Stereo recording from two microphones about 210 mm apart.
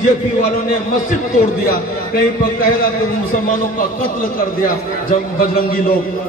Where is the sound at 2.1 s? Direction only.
45° left (ahead or behind).